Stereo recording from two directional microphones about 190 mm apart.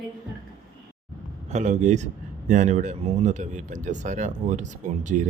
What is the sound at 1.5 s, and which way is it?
Speech, 35° right (ahead or behind).